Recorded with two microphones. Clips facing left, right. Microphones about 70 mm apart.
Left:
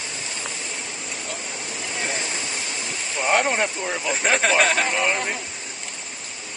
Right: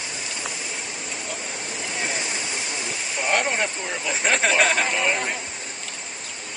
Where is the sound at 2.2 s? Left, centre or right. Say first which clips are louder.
Even; centre.